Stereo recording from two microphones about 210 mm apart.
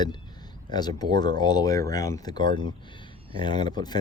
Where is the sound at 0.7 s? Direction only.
20° left (ahead or behind).